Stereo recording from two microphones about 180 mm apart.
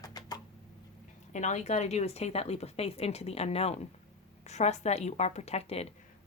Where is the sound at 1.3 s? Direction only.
40° left (ahead or behind).